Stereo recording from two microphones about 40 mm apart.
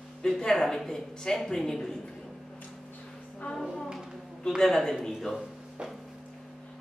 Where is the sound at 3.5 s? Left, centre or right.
Centre.